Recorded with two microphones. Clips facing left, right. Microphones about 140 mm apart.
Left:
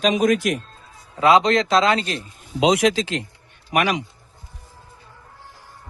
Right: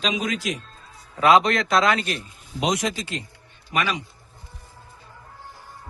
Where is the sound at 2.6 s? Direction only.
90° left.